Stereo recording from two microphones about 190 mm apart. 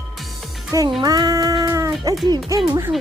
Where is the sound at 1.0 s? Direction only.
20° right (ahead or behind).